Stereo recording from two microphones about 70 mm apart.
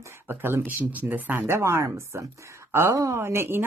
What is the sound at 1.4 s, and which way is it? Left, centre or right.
Speech, right.